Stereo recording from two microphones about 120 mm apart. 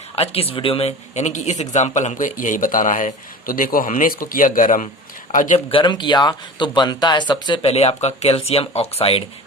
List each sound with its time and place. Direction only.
0.2 s speech: 55° left (ahead or behind); by 5.6 s 90° left
5.7 s speech: 40° left (ahead or behind)
7.6 s speech: 60° left (ahead or behind)